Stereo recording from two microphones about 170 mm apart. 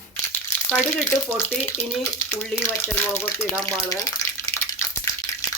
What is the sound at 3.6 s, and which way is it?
Water, 15° left (ahead or behind).